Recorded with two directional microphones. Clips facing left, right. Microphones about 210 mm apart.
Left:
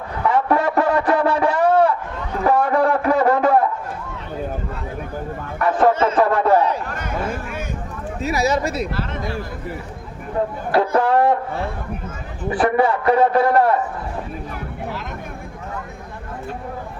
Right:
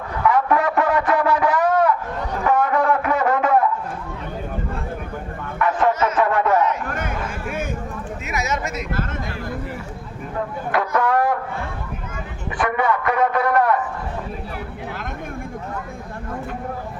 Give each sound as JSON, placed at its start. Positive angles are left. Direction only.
{"t": 0.3, "sound": "a sound", "side_deg": 30}
{"t": 5.5, "sound": "music", "side_deg": 35}
{"t": 6.8, "sound": "a sound", "side_deg": -50}
{"t": 8.2, "sound": "speech", "side_deg": 35}
{"t": 10.7, "sound": "music", "side_deg": 30}
{"t": 12.5, "sound": "a man's voice", "side_deg": 35}